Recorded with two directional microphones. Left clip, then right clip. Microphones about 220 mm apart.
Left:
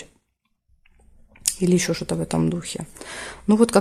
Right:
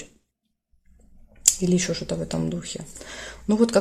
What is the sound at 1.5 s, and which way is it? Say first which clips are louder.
Speech: left 1 dB; 35° left (ahead or behind).